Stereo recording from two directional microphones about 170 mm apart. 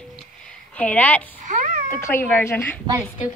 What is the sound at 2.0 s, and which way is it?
Speech, 10° left (ahead or behind).